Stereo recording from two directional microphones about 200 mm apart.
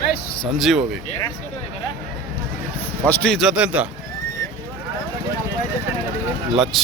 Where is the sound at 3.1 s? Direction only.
5° left (ahead or behind).